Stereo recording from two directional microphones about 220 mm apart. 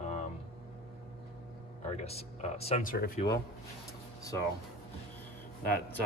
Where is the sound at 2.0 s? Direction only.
30° left (ahead or behind).